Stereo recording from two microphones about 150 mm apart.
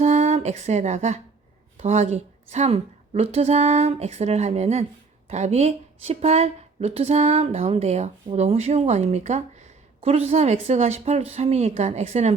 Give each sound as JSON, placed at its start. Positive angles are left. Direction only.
{"t": 0.0, "sound": "speech", "side_deg": -50}